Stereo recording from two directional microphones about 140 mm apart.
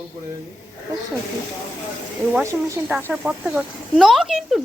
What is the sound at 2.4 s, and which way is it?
A woman's voice, 20° right (ahead or behind).